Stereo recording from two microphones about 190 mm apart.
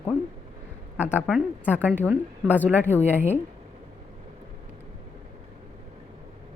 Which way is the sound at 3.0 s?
35° left (ahead or behind).